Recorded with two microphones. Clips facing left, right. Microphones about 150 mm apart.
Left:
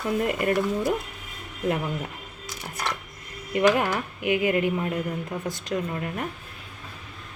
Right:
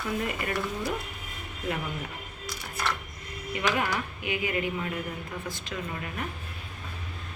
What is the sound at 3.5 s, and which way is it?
A woman's voice, 55° left (ahead or behind).